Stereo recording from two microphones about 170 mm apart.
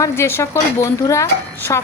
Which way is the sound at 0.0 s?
15° left (ahead or behind).